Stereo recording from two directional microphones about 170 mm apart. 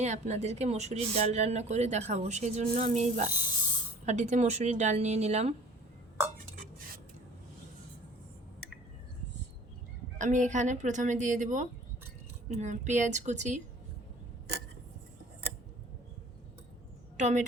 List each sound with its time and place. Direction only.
0.0 s speech: 45° right (ahead or behind)
6.6 s stir: 55° right (ahead or behind)
10.2 s speech: 45° right (ahead or behind)
17.2 s a woman's voice: 45° right (ahead or behind)